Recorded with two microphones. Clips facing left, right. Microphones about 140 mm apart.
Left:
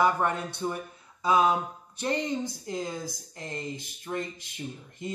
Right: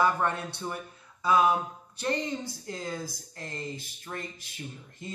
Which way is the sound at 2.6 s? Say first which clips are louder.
Left 2 dB; 20° left (ahead or behind).